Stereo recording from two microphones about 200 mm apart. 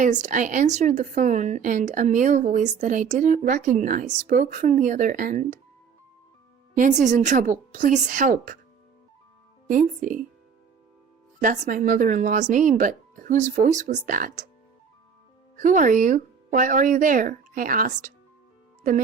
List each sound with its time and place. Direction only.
0.0 s a woman's voice: 40° right (ahead or behind)
6.7 s a woman's voice: 40° right (ahead or behind)
9.6 s a woman's voice: 40° right (ahead or behind)
11.4 s a woman's voice: 40° right (ahead or behind)
15.5 s a woman's voice: 40° right (ahead or behind)